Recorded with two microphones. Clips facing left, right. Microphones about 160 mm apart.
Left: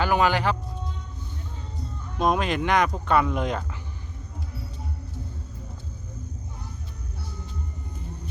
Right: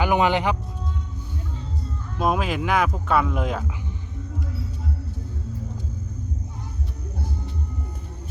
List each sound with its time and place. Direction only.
0.0 s speech: 20° right (ahead or behind)
2.1 s speech: 5° right (ahead or behind)